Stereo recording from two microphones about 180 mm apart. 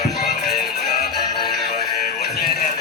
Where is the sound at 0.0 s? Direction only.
60° left (ahead or behind).